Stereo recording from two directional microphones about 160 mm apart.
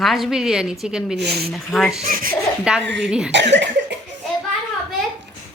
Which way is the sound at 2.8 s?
90° right.